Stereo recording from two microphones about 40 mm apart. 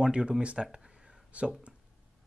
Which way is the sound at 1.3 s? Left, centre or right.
Right.